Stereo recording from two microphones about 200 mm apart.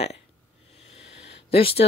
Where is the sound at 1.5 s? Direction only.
30° left (ahead or behind).